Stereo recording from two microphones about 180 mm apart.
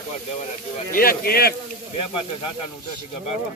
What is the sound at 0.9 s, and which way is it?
Speech, 55° left (ahead or behind).